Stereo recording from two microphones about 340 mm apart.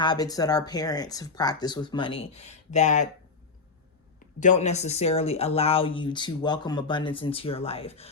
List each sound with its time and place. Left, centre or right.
0.0 s speech: centre
4.4 s speech: left